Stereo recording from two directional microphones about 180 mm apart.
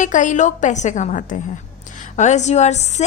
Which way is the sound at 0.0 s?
45° left (ahead or behind).